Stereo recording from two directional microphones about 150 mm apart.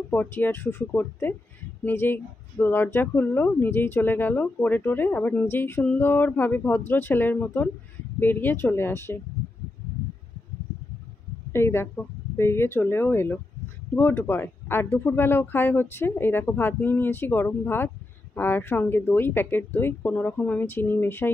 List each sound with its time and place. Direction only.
0.1 s speech: 15° left (ahead or behind)
11.5 s speech: 15° left (ahead or behind)